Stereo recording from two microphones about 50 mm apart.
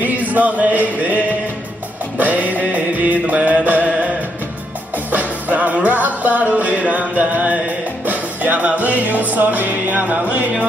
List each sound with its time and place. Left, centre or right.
0.0 s a sound: right
2.1 s music: right
5.1 s music: right